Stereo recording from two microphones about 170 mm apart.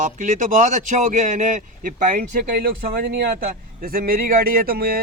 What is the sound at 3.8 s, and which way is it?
Speech, 60° right (ahead or behind).